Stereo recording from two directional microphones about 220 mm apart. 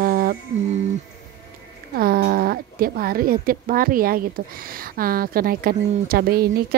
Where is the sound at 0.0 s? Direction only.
40° right (ahead or behind).